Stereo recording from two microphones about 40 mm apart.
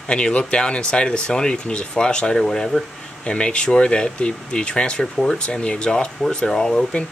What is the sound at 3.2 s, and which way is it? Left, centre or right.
Speech, left.